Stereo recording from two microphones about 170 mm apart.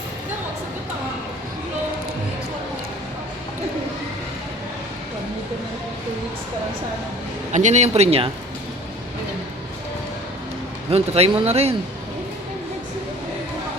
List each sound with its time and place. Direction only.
7.5 s speech: 45° right (ahead or behind)
10.9 s speech: 35° right (ahead or behind)